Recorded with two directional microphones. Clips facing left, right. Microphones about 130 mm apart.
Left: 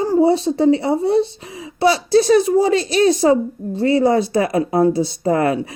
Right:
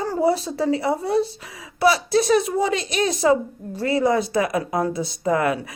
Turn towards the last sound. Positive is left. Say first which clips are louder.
# left 4 dB
turn(degrees=30)  # may be behind; listen again after turning